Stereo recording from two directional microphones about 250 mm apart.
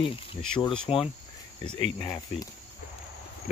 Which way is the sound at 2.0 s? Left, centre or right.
Centre.